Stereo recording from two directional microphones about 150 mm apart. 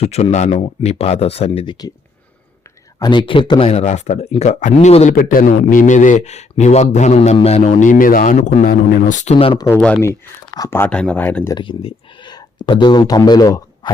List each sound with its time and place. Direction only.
0.0 s speech: 45° left (ahead or behind)
3.0 s speech: 30° left (ahead or behind); by 5.2 s 50° left (ahead or behind)
5.2 s speech: 65° left (ahead or behind); by 9.6 s 45° left (ahead or behind)
9.6 s speech: 10° left (ahead or behind)
10.1 s speech: 20° left (ahead or behind)
11.5 s speech: 35° left (ahead or behind)